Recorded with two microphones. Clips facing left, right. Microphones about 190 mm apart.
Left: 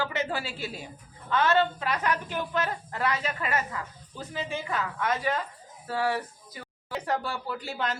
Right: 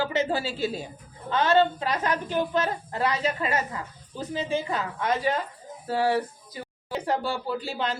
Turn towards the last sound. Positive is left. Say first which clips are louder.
# right 3 dB
turn(degrees=-30)  # may be behind; listen again after turning